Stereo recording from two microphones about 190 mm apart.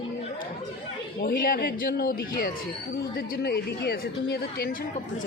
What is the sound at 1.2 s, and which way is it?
A woman's voice, 50° left (ahead or behind).